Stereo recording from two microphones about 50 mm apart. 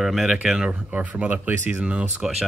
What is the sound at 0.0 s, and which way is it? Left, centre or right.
Speech, centre.